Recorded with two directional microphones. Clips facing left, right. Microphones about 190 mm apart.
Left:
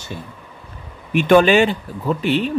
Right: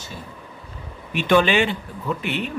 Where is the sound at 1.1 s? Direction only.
50° left (ahead or behind); by 2.5 s 35° left (ahead or behind).